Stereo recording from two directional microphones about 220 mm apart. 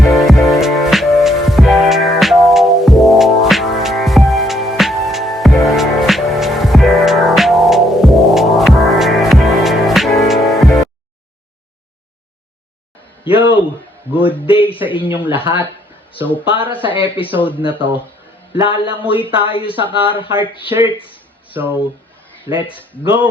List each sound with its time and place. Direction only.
0.0 s music: centre (ahead or behind)
13.2 s a sound: 25° left (ahead or behind)
15.2 s speech: 10° right (ahead or behind)
16.5 s speech: 25° left (ahead or behind)
22.5 s speech: 25° left (ahead or behind)